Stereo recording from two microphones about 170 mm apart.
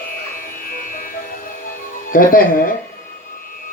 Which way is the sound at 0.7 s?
55° left (ahead or behind).